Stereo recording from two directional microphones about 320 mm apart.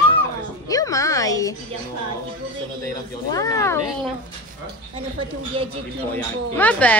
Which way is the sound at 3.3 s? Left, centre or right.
Centre.